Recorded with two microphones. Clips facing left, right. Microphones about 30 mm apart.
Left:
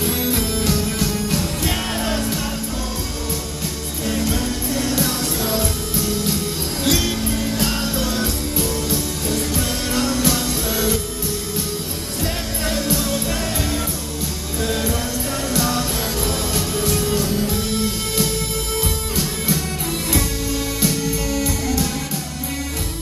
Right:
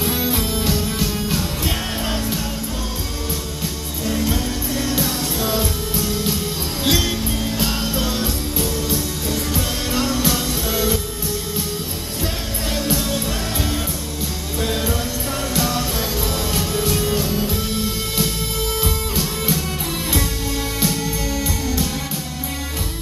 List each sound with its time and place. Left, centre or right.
0.0 s music: centre
4.2 s music: centre
12.6 s music: centre
14.6 s music: centre
19.1 s music: centre
20.8 s music: centre